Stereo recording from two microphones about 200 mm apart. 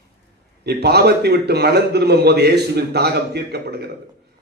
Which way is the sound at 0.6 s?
55° right (ahead or behind).